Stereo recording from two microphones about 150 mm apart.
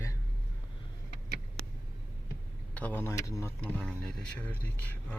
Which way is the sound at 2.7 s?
10° left (ahead or behind).